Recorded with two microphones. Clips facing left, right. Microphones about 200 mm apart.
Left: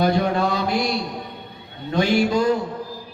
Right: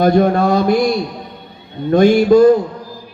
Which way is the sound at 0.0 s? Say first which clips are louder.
Right 7 dB; 50° right (ahead or behind).